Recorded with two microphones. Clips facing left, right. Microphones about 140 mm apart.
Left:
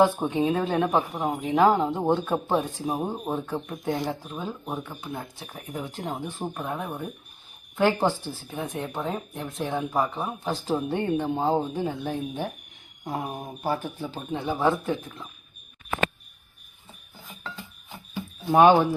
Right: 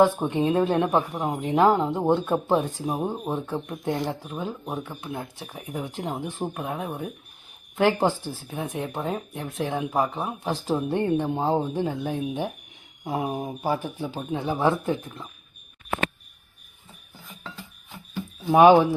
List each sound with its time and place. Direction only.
0.0 s speech: centre (ahead or behind)
8.4 s speech: 5° right (ahead or behind)
18.4 s speech: 5° right (ahead or behind)